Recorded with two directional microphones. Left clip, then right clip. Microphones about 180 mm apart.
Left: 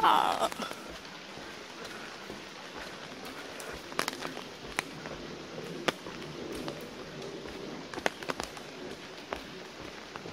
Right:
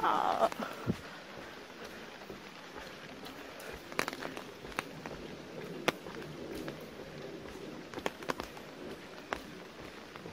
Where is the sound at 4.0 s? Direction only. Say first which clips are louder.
Left 2 dB; 30° right (ahead or behind).